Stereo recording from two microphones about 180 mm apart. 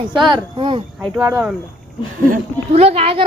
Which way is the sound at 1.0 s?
5° right (ahead or behind).